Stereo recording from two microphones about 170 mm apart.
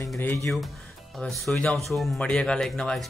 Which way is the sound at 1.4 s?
5° left (ahead or behind).